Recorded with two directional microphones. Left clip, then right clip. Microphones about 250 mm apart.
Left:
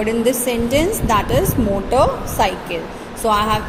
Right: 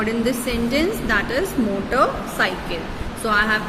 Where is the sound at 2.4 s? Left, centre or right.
Centre.